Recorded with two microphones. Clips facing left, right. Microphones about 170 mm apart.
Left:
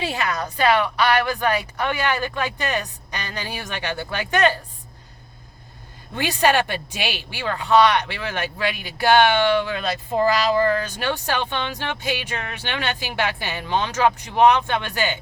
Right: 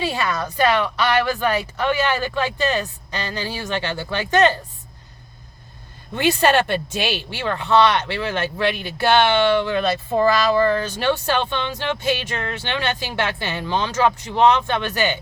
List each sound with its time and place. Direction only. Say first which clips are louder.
0.0 s speech: right 2 dB; 15° left (ahead or behind)
6.1 s speech: right 3 dB; 15° left (ahead or behind)